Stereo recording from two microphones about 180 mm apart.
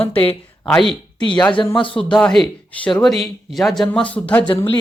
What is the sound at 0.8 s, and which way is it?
Speech, 30° right (ahead or behind).